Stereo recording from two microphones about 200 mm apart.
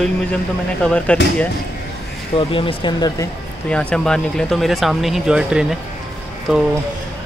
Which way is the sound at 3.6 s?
5° left (ahead or behind).